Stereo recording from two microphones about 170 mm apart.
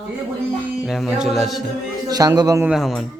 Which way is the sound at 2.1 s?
20° right (ahead or behind).